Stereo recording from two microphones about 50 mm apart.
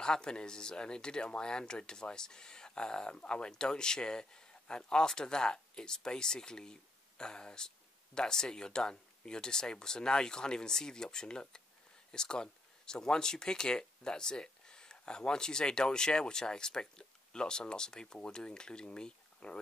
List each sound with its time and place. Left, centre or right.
0.0 s speech: centre